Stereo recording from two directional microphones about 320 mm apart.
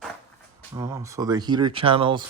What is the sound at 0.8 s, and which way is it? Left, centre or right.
Speech, centre.